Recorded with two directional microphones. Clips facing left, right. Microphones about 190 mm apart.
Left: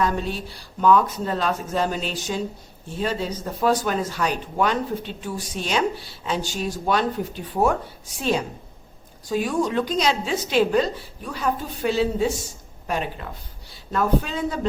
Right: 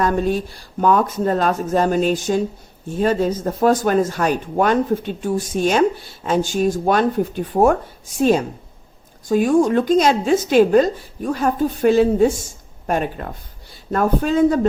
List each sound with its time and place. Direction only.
0.0 s speech: 50° right (ahead or behind)